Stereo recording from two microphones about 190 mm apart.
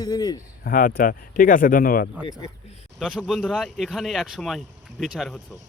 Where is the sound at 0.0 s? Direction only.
20° left (ahead or behind).